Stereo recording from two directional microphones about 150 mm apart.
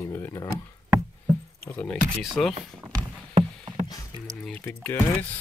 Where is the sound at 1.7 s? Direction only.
10° left (ahead or behind).